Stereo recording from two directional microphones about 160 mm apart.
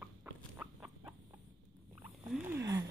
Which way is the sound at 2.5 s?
20° right (ahead or behind).